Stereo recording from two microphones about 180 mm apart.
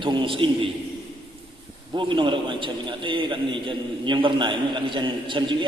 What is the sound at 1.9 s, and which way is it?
A man's voice, 25° right (ahead or behind).